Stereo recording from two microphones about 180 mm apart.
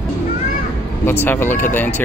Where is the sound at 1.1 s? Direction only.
10° left (ahead or behind).